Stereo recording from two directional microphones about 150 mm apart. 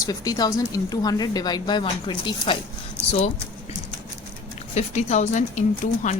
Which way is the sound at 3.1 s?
45° left (ahead or behind).